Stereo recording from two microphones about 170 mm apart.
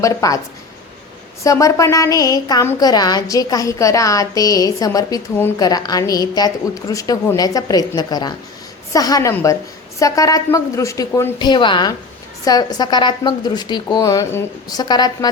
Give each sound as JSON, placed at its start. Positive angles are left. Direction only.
{"t": 0.0, "sound": "a woman's voice", "side_deg": 20}
{"t": 1.5, "sound": "a woman's voice", "side_deg": 20}